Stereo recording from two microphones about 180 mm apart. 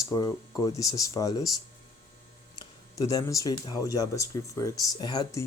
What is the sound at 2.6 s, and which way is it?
Speech, 20° left (ahead or behind).